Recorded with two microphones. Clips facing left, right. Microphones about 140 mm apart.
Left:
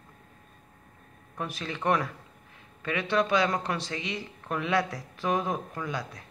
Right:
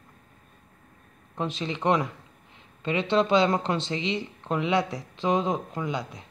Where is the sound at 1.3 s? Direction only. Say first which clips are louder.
Right 5 dB; 20° right (ahead or behind).